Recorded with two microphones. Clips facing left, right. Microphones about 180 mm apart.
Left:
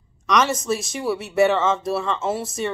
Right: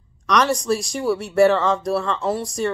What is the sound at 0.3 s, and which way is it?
Speech, centre (ahead or behind).